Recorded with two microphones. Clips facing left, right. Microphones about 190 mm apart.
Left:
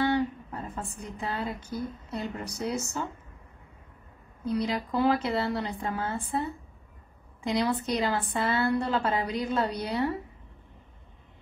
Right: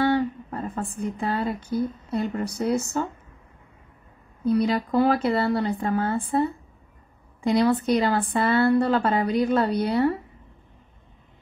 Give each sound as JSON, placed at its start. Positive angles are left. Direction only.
{"t": 0.0, "sound": "a sound", "side_deg": -55}
{"t": 2.1, "sound": "a woman's voice", "side_deg": -55}
{"t": 4.5, "sound": "a woman's voice", "side_deg": -55}
{"t": 7.4, "sound": "a woman's voice", "side_deg": -55}